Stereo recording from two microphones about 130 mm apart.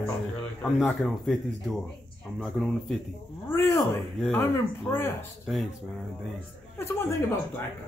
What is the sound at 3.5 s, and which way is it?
Speech, 15° left (ahead or behind).